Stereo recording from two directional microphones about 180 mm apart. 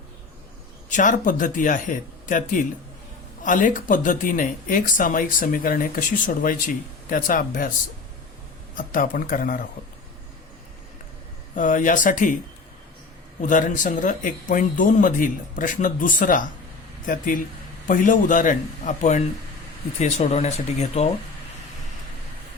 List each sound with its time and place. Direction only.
0.9 s speech: 45° left (ahead or behind)
8.7 s speech: 50° left (ahead or behind)
11.5 s speech: 45° left (ahead or behind)
13.4 s speech: 45° left (ahead or behind)